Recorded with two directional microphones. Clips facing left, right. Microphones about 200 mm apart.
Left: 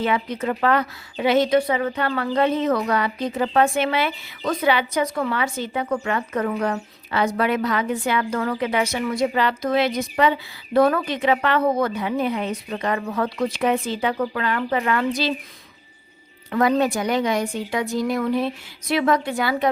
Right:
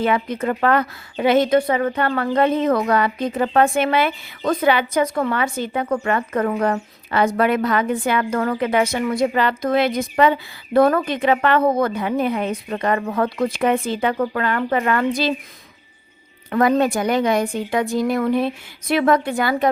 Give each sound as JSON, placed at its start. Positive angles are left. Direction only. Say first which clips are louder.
{"t": 0.0, "sound": "a woman's voice", "louder": "right 3 dB", "side_deg": -50}
{"t": 16.5, "sound": "a woman's voice", "louder": "right 2 dB", "side_deg": -50}